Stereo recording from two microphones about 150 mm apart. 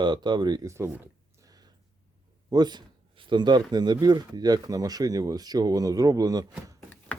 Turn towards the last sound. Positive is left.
turn(degrees=-25)  # may be behind; listen again after turning